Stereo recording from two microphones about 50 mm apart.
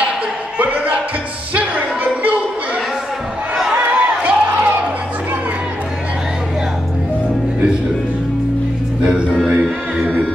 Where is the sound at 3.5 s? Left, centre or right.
Centre.